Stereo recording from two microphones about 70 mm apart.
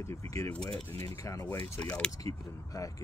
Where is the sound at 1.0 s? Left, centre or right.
Left.